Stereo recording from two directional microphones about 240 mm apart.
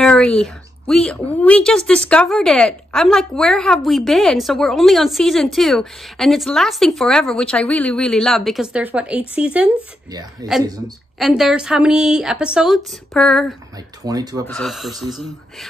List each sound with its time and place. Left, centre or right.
0.0 s a woman's voice: centre
10.4 s speech: centre
11.1 s a woman's voice: centre
14.0 s speech: centre
14.6 s a woman's voice: centre